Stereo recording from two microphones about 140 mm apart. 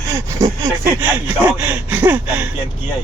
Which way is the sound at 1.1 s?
15° right (ahead or behind).